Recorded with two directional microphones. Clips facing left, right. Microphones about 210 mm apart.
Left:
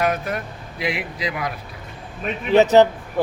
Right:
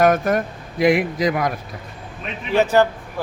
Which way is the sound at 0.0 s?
45° right (ahead or behind).